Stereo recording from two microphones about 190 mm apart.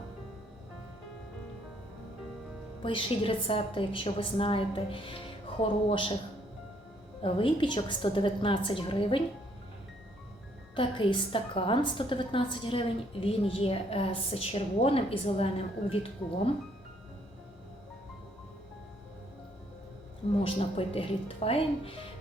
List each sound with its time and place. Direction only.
2.8 s a woman's voice: 25° left (ahead or behind)
7.2 s a woman's voice: 25° left (ahead or behind)
10.8 s a woman's voice: 25° left (ahead or behind)
20.4 s a woman's voice: 30° left (ahead or behind)